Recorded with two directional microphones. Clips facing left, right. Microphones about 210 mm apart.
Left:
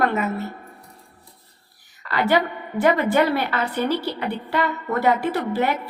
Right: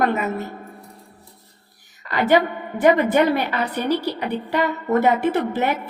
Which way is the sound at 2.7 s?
15° right (ahead or behind).